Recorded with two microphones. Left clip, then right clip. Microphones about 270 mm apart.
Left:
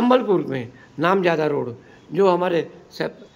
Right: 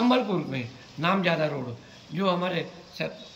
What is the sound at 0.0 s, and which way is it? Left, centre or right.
A man's voice, centre.